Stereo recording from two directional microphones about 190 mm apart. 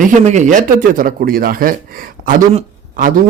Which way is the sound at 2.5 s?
40° right (ahead or behind).